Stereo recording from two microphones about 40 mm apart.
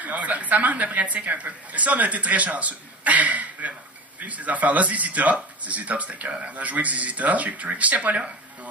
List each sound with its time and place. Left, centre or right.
0.0 s speech: right